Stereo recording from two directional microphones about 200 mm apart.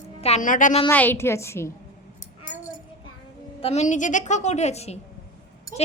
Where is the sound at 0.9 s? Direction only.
10° left (ahead or behind).